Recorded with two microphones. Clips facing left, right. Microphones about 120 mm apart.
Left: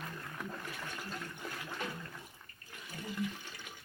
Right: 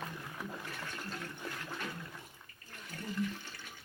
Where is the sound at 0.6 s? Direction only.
5° left (ahead or behind).